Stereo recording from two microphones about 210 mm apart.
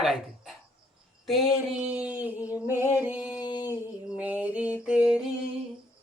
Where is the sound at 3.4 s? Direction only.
20° left (ahead or behind).